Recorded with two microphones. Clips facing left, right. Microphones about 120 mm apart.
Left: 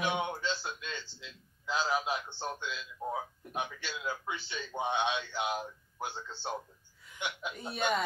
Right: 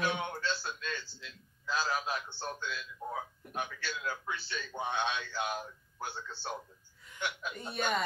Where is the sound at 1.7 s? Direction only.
20° left (ahead or behind).